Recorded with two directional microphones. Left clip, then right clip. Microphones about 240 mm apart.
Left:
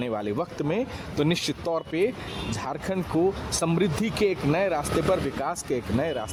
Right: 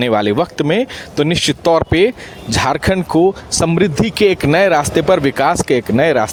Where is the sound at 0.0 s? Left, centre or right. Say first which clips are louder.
Right 15 dB; right.